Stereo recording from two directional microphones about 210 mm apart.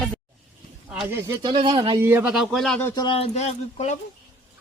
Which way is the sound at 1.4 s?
20° right (ahead or behind).